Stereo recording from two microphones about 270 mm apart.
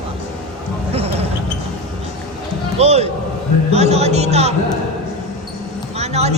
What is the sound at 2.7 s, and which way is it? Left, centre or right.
A man's voice, right.